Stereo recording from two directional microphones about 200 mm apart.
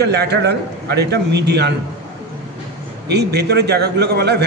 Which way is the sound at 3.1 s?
55° right (ahead or behind).